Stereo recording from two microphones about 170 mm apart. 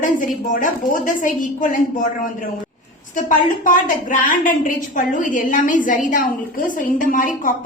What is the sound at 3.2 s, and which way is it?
A woman's voice, 50° left (ahead or behind).